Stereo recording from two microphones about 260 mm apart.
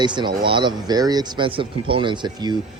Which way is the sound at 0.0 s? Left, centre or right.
Centre.